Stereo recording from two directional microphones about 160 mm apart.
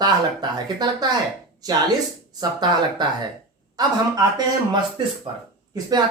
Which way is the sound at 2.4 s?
25° right (ahead or behind).